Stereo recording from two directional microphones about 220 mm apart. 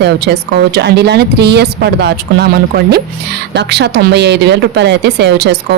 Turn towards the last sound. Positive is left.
turn(degrees=-50)  # may be behind; listen again after turning